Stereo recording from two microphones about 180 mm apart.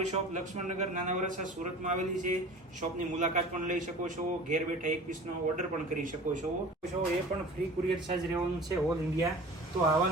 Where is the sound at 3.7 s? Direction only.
45° right (ahead or behind).